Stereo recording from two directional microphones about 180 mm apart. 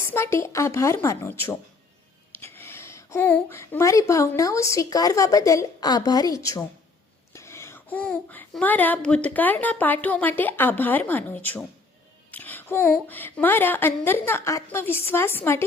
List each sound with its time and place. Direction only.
0.0 s speech: 15° left (ahead or behind)